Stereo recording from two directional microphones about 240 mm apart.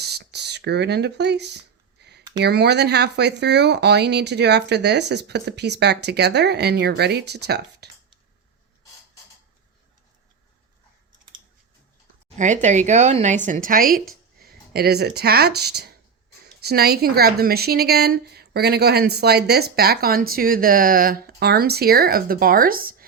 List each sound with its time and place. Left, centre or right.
0.0 s speech: right
2.0 s a sound: right
2.4 s speech: right
12.4 s speech: right